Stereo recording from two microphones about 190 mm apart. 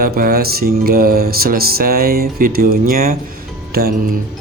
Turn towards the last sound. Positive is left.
turn(degrees=-55)  # may be behind; listen again after turning